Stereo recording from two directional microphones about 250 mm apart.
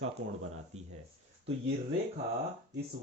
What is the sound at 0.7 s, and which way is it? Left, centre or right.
Speech, right.